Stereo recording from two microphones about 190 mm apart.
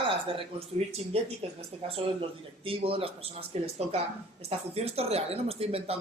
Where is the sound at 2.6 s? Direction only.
30° right (ahead or behind).